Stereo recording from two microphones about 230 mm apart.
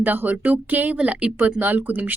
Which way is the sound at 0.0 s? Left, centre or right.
Centre.